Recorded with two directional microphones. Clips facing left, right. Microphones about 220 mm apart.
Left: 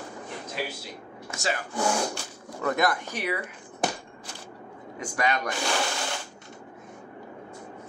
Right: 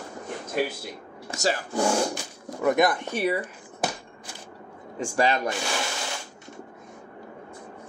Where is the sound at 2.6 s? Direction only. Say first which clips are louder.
Right 4 dB; 15° right (ahead or behind).